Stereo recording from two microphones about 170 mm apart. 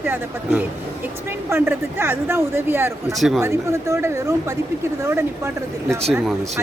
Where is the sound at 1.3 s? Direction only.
15° right (ahead or behind).